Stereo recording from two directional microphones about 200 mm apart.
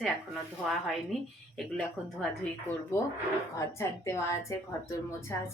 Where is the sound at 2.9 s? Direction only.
10° left (ahead or behind).